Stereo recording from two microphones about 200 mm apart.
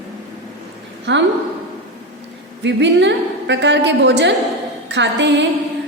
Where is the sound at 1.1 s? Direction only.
60° right (ahead or behind).